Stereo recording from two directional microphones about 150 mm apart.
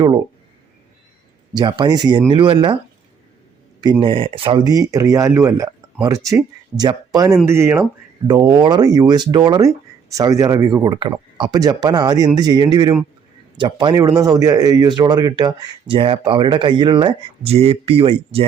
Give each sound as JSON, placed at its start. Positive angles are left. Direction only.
{"t": 1.5, "sound": "speech", "side_deg": -30}
{"t": 4.0, "sound": "speech", "side_deg": -35}
{"t": 8.3, "sound": "speech", "side_deg": -30}